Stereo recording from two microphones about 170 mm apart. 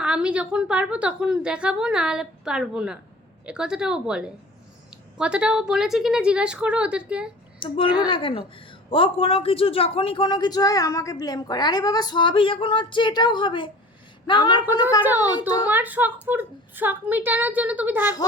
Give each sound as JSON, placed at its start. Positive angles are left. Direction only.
{"t": 0.0, "sound": "a woman's voice", "side_deg": -5}
{"t": 7.6, "sound": "a woman's voice", "side_deg": 30}
{"t": 15.0, "sound": "a woman's voice", "side_deg": -10}
{"t": 15.4, "sound": "a woman's voice", "side_deg": 25}
{"t": 15.6, "sound": "a woman's voice", "side_deg": -10}